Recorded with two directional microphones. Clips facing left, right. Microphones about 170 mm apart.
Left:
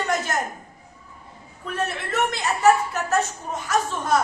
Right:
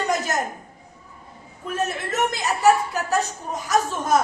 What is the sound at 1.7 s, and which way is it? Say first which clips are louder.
A woman's voice: right 1 dB; 40° right (ahead or behind).